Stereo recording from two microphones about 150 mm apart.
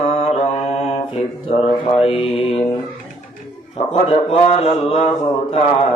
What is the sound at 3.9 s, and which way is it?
Mantra, 40° left (ahead or behind).